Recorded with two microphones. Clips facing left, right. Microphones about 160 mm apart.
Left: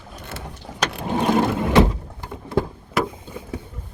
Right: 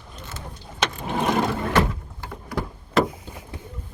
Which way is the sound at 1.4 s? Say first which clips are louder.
Left 7 dB; 15° left (ahead or behind).